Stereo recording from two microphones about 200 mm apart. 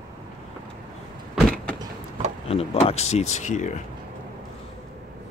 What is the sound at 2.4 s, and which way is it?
Speech, 30° left (ahead or behind).